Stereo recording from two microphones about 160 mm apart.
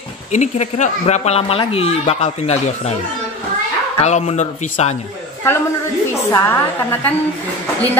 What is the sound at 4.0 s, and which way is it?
Speech, 45° left (ahead or behind).